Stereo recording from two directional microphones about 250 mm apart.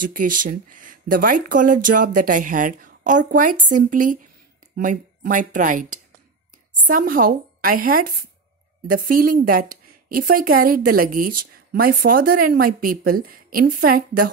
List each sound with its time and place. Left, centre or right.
0.0 s speech: right
8.9 s speech: right